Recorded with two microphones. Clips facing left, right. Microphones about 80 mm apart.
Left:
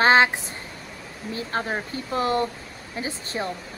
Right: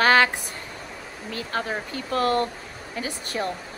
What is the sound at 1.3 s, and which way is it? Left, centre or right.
Speech, left.